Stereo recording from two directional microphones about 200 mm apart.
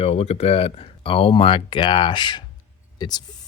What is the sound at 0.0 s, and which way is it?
Speech, 30° left (ahead or behind).